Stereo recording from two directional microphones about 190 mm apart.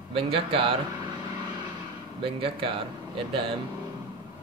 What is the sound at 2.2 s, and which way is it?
Speech, 30° right (ahead or behind).